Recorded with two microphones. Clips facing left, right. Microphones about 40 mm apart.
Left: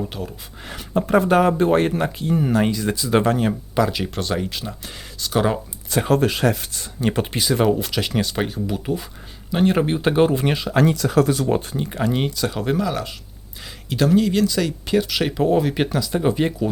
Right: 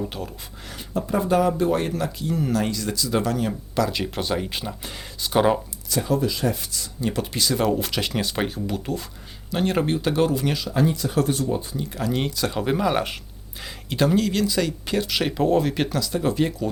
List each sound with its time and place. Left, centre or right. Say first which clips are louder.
0.1 s speech: left 2 dB; centre
1.0 s speech: left 7 dB; left
1.3 s speech: left 1 dB; left
2.3 s speech: left 5 dB; left
2.9 s speech: left 5 dB; left
3.9 s speech: left 1 dB; centre
5.9 s speech: left 4 dB; left
6.7 s speech: left 4 dB; left
7.3 s speech: left 2 dB; centre
7.8 s speech: left 3 dB; centre
10.0 s speech: left 4 dB; left
10.8 s speech: left 5 dB; left
11.9 s speech: left 4 dB; left
12.4 s speech: left 1 dB; centre